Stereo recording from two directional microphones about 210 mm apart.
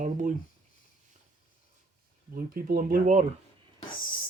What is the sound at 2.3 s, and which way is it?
Speech, 45° right (ahead or behind).